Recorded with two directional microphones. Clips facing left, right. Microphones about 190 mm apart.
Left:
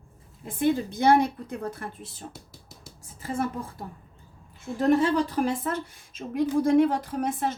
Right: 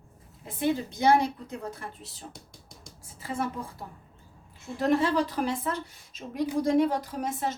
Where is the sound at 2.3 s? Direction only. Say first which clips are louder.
Left 2 dB; 5° left (ahead or behind).